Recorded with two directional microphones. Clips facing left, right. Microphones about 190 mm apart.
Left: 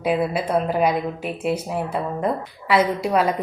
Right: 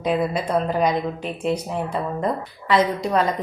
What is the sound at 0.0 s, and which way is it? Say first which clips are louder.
Speech: left 1 dB; 5° left (ahead or behind).